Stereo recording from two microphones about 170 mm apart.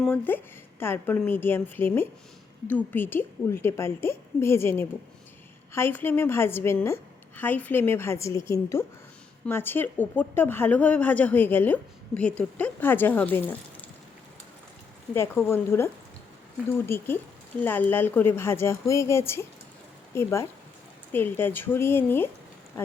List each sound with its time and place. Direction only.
0.0 s a woman's voice: 10° left (ahead or behind)
15.1 s a woman's voice: 15° left (ahead or behind)